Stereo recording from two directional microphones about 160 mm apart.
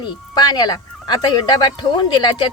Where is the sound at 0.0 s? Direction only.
25° left (ahead or behind).